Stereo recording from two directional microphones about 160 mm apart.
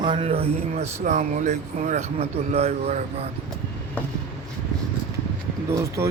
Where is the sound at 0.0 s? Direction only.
35° right (ahead or behind).